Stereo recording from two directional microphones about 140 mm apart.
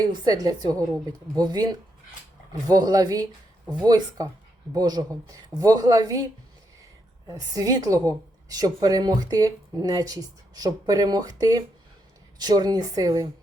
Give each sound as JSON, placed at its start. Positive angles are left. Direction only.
{"t": 0.1, "sound": "a woman's voice", "side_deg": -30}
{"t": 7.3, "sound": "a woman's voice", "side_deg": -25}